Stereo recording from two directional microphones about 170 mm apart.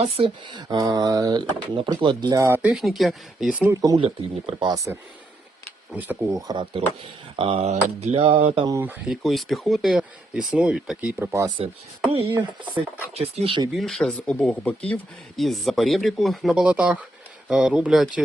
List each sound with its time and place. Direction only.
0.0 s speech: 30° right (ahead or behind)
2.6 s speech: 5° right (ahead or behind)
3.7 s speech: 20° right (ahead or behind)
3.9 s a sound: 35° right (ahead or behind)
5.9 s speech: 10° right (ahead or behind)
6.5 s speech: 30° right (ahead or behind)
7.3 s a sound: 30° right (ahead or behind)
8.6 s speech: 15° right (ahead or behind)
9.2 s speech: centre (ahead or behind); by 11.7 s 25° right (ahead or behind)
13.1 s a sound: 35° right (ahead or behind)
13.7 s speech: centre (ahead or behind)